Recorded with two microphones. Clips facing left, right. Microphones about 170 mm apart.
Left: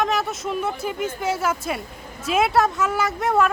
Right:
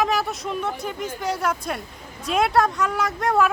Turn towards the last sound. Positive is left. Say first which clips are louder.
# even
turn(degrees=0)  # may be behind; listen again after turning